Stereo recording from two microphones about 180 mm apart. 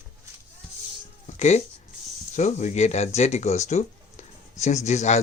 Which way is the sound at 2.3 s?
40° left (ahead or behind).